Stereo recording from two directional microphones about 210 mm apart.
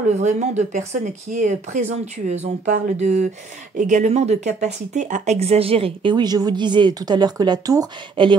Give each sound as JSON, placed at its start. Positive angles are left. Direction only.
{"t": 0.1, "sound": "speech", "side_deg": -35}